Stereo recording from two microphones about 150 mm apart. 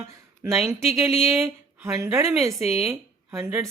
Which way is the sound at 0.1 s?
20° right (ahead or behind).